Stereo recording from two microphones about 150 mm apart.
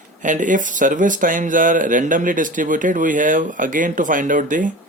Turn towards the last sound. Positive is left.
turn(degrees=-60)  # may be behind; listen again after turning